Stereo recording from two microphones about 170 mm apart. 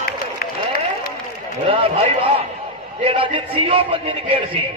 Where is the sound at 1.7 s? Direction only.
35° right (ahead or behind).